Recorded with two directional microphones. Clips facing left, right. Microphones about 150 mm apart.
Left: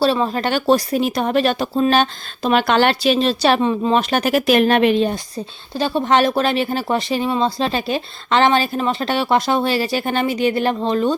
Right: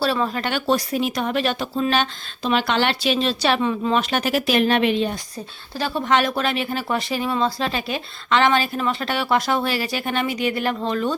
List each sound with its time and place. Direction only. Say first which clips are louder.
0.0 s speech: left 5 dB; 25° left (ahead or behind)
4.1 s speech: left 5 dB; 45° left (ahead or behind)
5.7 s speech: left 4 dB; 25° left (ahead or behind)